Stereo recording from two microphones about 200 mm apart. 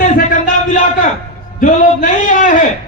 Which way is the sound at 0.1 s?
40° left (ahead or behind).